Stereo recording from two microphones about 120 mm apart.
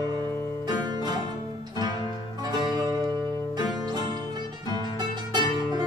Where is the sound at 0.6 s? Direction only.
35° right (ahead or behind).